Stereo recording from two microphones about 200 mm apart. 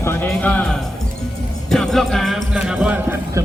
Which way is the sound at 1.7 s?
Centre (ahead or behind).